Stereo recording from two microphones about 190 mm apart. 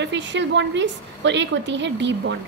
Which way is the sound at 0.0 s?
70° right (ahead or behind).